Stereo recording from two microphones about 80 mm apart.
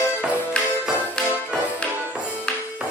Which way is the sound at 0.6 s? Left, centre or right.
Centre.